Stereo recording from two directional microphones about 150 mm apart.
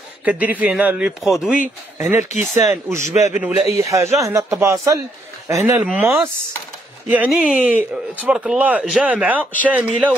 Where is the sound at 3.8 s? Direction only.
20° right (ahead or behind).